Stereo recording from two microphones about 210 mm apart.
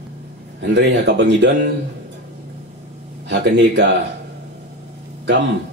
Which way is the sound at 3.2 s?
55° right (ahead or behind).